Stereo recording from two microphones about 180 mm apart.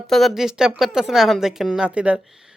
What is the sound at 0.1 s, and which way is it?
A woman's voice, centre (ahead or behind).